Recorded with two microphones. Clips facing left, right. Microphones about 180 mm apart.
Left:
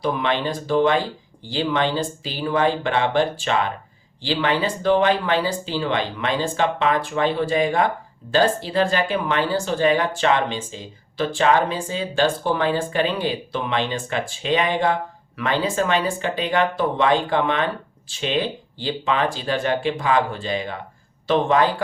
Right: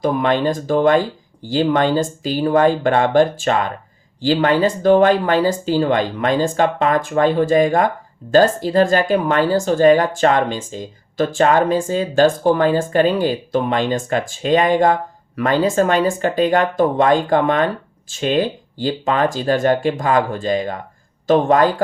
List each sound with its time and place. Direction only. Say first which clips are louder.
0.0 s speech: right 6 dB; 45° right (ahead or behind)